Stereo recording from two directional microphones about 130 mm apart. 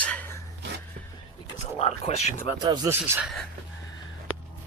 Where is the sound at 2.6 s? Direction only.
35° right (ahead or behind).